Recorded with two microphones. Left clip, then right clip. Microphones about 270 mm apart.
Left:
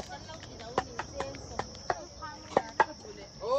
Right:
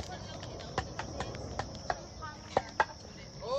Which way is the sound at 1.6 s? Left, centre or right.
Left.